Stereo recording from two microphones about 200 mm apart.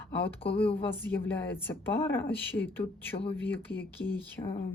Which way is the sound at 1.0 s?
10° left (ahead or behind).